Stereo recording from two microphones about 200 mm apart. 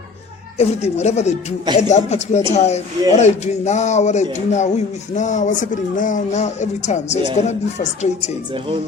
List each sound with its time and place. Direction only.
0.6 s speech: 35° left (ahead or behind)